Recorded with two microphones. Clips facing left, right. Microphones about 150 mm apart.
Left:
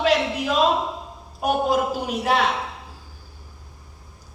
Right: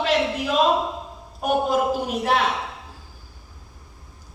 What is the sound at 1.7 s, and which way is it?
Speech, 45° right (ahead or behind).